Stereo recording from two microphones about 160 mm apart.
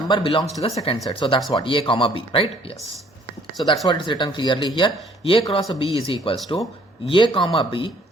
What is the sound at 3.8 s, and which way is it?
Speech, 30° left (ahead or behind).